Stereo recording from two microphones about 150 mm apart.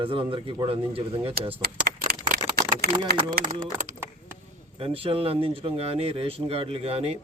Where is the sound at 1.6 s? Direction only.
90° right.